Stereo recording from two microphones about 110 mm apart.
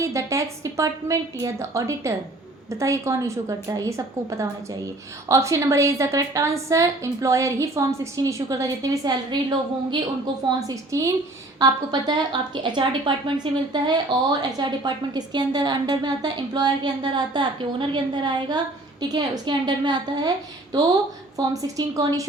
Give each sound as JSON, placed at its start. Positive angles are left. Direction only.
{"t": 0.0, "sound": "a woman's voice", "side_deg": -30}
{"t": 10.6, "sound": "a woman's voice", "side_deg": -30}
{"t": 21.3, "sound": "a woman's voice", "side_deg": -35}